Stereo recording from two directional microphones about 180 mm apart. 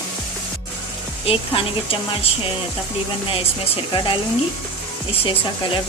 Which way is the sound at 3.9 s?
25° left (ahead or behind).